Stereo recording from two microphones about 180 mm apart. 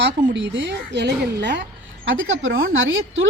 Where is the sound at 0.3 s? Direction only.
80° right.